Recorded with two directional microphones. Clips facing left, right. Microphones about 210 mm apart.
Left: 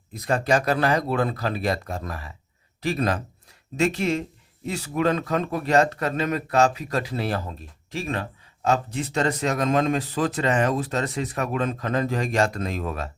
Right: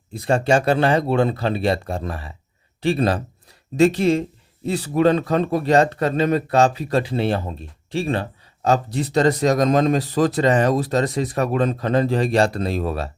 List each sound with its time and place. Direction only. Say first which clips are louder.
0.1 s speech: right 4 dB; 30° right (ahead or behind)